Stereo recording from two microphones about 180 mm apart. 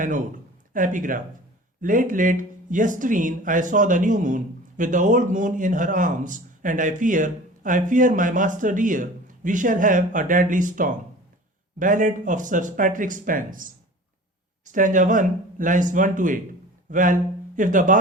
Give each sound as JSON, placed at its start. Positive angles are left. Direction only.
{"t": 0.7, "sound": "speech", "side_deg": -50}